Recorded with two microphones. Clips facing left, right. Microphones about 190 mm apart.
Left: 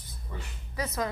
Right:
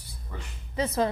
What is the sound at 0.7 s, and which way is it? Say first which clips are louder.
Speech: right 6 dB; 30° right (ahead or behind).